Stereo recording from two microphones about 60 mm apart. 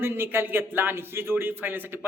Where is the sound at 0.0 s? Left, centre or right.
Right.